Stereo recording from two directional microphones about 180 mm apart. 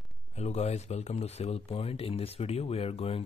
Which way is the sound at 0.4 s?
35° left (ahead or behind).